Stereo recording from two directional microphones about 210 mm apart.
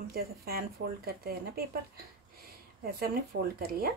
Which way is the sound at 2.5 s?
45° right (ahead or behind).